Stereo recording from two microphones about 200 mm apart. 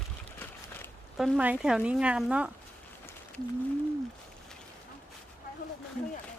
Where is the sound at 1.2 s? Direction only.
5° right (ahead or behind).